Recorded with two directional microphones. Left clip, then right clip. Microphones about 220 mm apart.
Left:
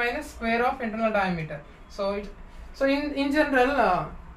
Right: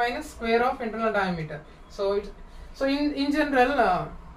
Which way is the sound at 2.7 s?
15° left (ahead or behind).